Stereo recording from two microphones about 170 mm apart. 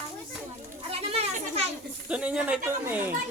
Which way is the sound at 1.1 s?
35° right (ahead or behind).